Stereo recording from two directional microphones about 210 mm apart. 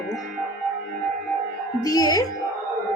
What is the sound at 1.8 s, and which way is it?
Speech, 15° left (ahead or behind).